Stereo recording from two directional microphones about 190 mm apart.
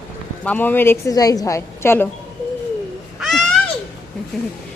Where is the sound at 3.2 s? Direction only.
Centre (ahead or behind).